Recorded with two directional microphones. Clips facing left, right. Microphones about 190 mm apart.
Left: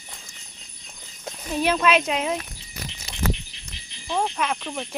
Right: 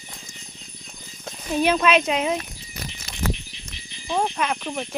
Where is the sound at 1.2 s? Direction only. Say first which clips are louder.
Right 2 dB; centre (ahead or behind).